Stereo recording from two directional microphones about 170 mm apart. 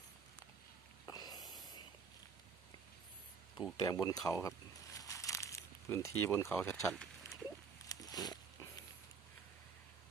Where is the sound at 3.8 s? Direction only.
20° left (ahead or behind).